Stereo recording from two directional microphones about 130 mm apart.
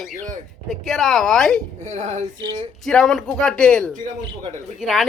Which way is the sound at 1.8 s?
60° right (ahead or behind).